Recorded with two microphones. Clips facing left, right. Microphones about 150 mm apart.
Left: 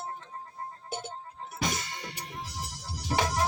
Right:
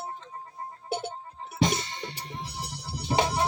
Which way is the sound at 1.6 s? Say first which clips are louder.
Right 7 dB; 25° right (ahead or behind).